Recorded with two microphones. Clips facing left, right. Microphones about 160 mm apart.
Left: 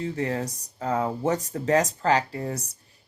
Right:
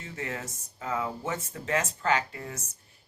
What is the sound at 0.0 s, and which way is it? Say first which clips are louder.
Speech: left 9 dB; 35° left (ahead or behind).